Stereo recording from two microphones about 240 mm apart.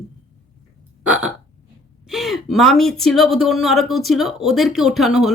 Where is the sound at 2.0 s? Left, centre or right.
Centre.